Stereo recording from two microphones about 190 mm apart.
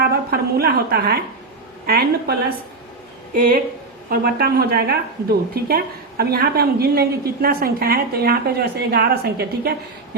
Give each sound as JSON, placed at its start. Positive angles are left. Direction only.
{"t": 0.0, "sound": "a woman's voice", "side_deg": -55}